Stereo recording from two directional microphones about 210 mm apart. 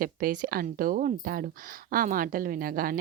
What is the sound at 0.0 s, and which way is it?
Speech, 40° right (ahead or behind).